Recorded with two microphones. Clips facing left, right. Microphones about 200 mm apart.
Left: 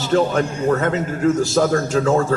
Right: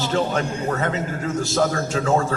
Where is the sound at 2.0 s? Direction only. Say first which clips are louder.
Even; 35° left (ahead or behind).